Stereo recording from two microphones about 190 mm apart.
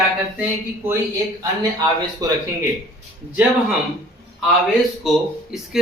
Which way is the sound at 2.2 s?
20° right (ahead or behind).